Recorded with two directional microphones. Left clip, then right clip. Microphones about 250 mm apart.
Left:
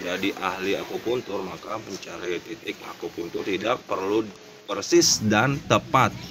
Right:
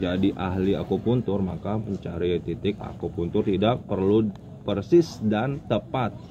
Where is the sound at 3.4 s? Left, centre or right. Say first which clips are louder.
Left 2 dB; left.